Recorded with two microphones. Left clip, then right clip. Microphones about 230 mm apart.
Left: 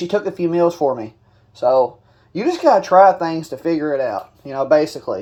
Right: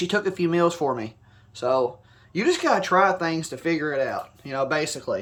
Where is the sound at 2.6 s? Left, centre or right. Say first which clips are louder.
Left 11 dB; centre.